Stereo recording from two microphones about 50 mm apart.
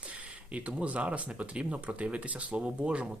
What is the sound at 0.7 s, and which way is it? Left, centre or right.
Speech, right.